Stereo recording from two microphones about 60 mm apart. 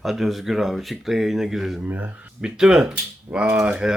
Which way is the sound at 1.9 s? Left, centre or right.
Right.